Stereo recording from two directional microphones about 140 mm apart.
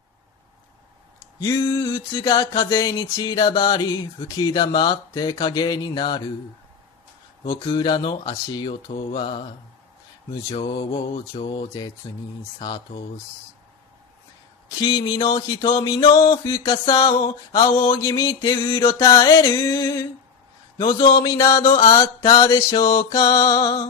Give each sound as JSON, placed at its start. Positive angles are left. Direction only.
{"t": 1.4, "sound": "music", "side_deg": 25}
{"t": 7.5, "sound": "speech", "side_deg": 30}
{"t": 10.7, "sound": "speech", "side_deg": 35}
{"t": 12.1, "sound": "music", "side_deg": 30}
{"t": 12.5, "sound": "speech", "side_deg": 30}
{"t": 14.8, "sound": "music", "side_deg": 25}
{"t": 16.7, "sound": "speech", "side_deg": 30}
{"t": 17.6, "sound": "music", "side_deg": 20}
{"t": 22.8, "sound": "speech", "side_deg": 40}
{"t": 23.0, "sound": "music", "side_deg": 25}